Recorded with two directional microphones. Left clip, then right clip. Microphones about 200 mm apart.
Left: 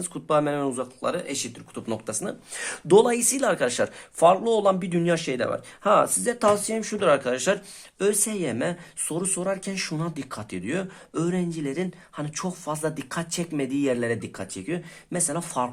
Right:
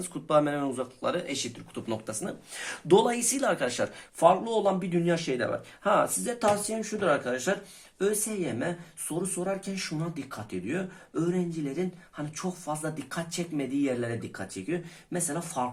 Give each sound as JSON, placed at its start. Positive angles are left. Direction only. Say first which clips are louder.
{"t": 0.0, "sound": "speech", "louder": "left 2 dB", "side_deg": 30}